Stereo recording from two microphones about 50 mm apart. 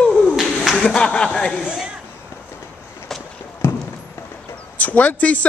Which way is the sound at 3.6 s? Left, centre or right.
Left.